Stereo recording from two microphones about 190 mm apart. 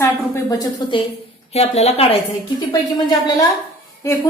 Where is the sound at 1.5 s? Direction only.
35° left (ahead or behind).